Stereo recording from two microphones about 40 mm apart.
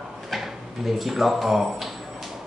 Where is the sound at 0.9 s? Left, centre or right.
Centre.